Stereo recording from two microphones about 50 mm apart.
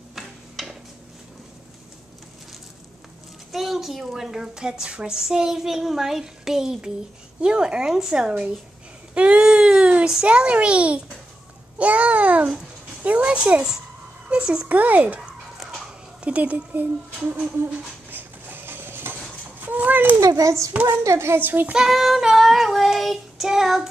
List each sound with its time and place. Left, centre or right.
0.1 s a sound: centre
3.5 s a child's voice: centre; by 13.7 s right
14.3 s a sound: centre
14.7 s a child's voice: right
15.5 s a sound: centre
16.2 s speech: right
18.1 s dishes: right
19.6 s a sound: right
20.2 s a child's voice: right
21.0 s speech: right
21.4 s child singing: right
21.7 s child singing: centre